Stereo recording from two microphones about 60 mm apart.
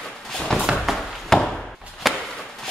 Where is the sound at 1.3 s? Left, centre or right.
Centre.